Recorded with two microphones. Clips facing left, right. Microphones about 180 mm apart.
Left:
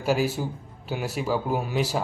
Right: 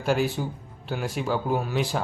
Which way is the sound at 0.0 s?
5° left (ahead or behind).